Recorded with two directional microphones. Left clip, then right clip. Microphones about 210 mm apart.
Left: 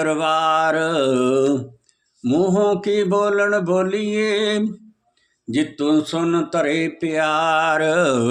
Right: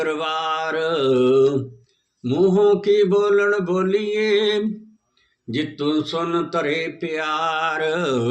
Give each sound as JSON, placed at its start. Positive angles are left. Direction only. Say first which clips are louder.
{"t": 0.0, "sound": "speech", "louder": "left 4 dB", "side_deg": 50}